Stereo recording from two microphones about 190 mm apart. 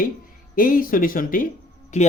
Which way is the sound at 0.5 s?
45° left (ahead or behind).